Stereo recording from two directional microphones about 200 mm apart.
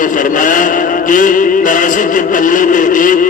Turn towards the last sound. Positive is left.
turn(degrees=40)  # may be behind; listen again after turning